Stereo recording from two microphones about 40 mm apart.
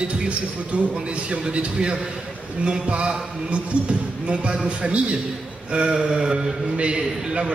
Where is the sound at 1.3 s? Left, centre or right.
Right.